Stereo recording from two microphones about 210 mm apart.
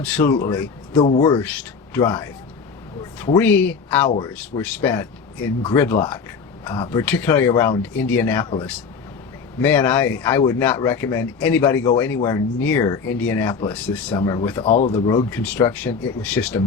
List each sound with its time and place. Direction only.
0.0 s speech: 10° left (ahead or behind)
6.7 s speech: 25° left (ahead or behind)
7.0 s speech: 10° left (ahead or behind)
9.6 s speech: 10° left (ahead or behind)
14.2 s speech: 20° left (ahead or behind)
14.7 s speech: 35° left (ahead or behind)
14.9 s speech: 15° left (ahead or behind)